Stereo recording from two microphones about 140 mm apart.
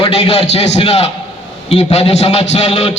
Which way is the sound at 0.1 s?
45° left (ahead or behind).